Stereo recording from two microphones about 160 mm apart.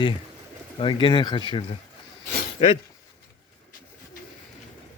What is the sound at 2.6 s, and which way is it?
Speech, 40° left (ahead or behind).